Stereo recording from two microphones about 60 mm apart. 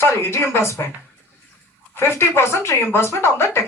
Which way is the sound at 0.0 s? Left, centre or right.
Left.